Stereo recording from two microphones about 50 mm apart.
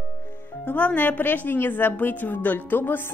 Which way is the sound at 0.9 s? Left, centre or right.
Left.